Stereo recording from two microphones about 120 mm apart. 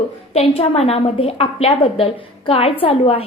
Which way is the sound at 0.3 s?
55° left (ahead or behind).